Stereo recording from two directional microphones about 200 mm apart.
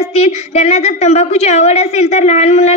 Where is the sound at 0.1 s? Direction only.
30° left (ahead or behind).